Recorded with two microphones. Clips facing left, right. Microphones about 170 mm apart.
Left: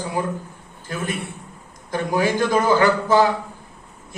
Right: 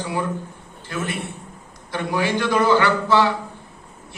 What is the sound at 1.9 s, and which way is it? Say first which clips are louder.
A man's voice: left 2 dB; 40° left (ahead or behind).